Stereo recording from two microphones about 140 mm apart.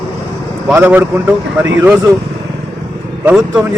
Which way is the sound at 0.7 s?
15° right (ahead or behind).